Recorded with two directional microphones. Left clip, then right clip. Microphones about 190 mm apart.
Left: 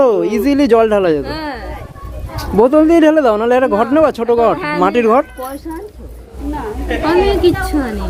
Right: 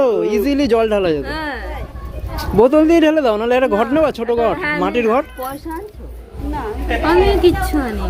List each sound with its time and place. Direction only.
0.0 s speech: 20° left (ahead or behind)
1.2 s a sound: 35° left (ahead or behind)
2.6 s a woman's voice: centre (ahead or behind)
2.9 s speech: 10° left (ahead or behind)
4.5 s speech: 40° left (ahead or behind)
4.8 s speech: 25° left (ahead or behind)
6.5 s a woman's voice: centre (ahead or behind)
7.1 s speech: 20° left (ahead or behind)